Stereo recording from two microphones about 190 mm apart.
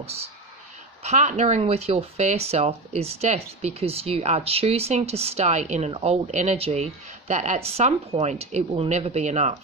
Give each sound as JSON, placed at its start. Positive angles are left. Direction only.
{"t": 0.0, "sound": "speech", "side_deg": -30}